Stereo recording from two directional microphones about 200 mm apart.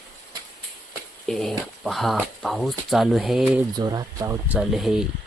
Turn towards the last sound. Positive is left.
turn(degrees=0)  # may be behind; listen again after turning